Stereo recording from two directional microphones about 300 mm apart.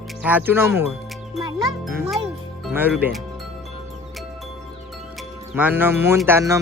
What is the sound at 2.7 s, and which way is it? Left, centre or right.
Speech, centre.